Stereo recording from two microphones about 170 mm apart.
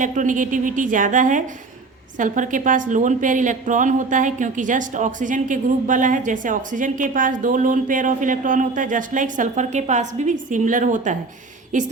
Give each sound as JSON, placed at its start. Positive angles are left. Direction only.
{"t": 0.0, "sound": "a woman's voice", "side_deg": -50}